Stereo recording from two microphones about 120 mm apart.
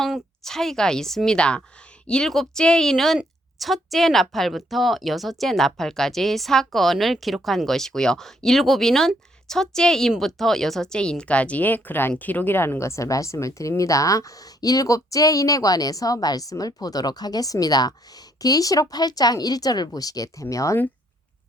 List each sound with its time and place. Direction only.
0.0 s a woman's voice: centre (ahead or behind); by 20.7 s 25° left (ahead or behind)